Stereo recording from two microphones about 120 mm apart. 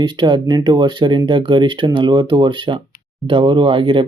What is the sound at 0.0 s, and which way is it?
Speech, 40° right (ahead or behind).